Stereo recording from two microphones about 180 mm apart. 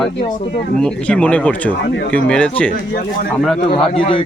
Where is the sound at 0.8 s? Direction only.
5° left (ahead or behind).